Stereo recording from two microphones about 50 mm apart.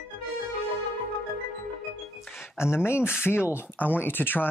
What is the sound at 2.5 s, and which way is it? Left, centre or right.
Speech, left.